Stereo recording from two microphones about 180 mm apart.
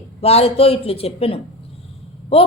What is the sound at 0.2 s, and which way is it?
A woman's voice, 35° left (ahead or behind).